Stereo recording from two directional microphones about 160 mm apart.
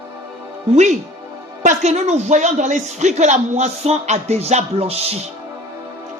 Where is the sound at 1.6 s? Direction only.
45° right (ahead or behind).